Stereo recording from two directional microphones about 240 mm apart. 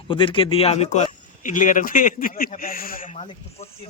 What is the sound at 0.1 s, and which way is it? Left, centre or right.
Speech, left.